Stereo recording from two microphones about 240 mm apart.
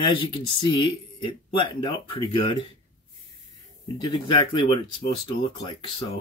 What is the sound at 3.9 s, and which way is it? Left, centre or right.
Speech, centre.